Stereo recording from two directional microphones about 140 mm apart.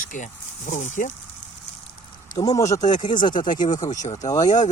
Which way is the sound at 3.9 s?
25° left (ahead or behind).